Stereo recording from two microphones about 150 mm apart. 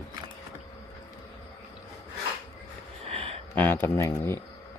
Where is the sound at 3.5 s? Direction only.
10° left (ahead or behind).